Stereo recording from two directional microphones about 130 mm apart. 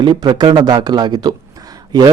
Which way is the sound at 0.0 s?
35° right (ahead or behind).